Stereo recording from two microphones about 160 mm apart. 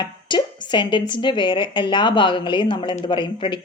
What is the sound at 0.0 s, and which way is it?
Speech, 30° left (ahead or behind).